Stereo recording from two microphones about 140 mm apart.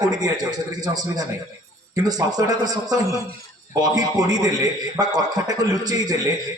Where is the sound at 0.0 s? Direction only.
30° right (ahead or behind).